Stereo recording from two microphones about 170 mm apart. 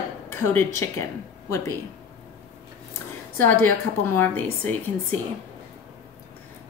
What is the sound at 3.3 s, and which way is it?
Speech, 10° left (ahead or behind).